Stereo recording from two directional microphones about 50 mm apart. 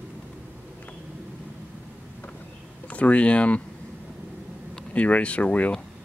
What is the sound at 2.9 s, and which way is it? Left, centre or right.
Speech, left.